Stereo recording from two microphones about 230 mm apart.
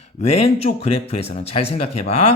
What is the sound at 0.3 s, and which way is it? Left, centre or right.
Speech, left.